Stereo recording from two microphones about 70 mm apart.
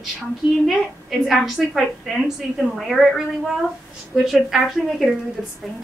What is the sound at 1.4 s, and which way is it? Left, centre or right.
A woman's voice, centre.